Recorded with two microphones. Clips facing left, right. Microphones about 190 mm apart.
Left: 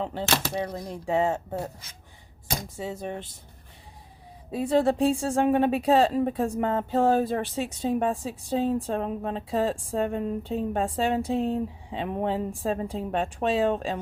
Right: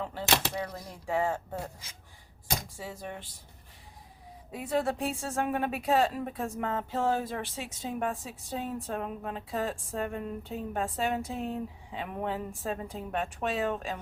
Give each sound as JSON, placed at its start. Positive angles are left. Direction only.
{"t": 0.0, "sound": "a woman's voice", "side_deg": 25}
{"t": 2.7, "sound": "a woman's voice", "side_deg": 25}
{"t": 4.5, "sound": "a woman's voice", "side_deg": 30}